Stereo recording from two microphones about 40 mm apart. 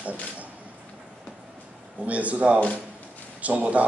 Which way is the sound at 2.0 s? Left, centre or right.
Right.